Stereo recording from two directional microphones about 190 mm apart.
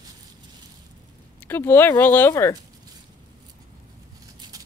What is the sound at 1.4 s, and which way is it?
Speech, 10° left (ahead or behind).